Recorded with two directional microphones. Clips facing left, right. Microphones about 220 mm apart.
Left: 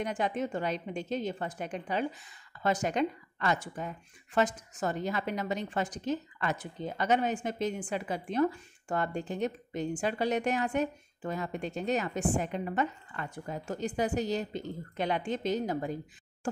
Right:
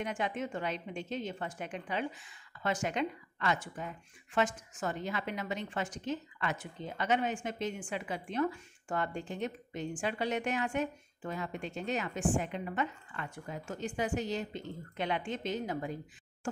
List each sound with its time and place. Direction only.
0.0 s speech: 40° left (ahead or behind)